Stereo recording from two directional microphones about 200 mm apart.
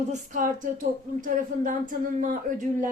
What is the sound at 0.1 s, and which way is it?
Speech, 40° right (ahead or behind).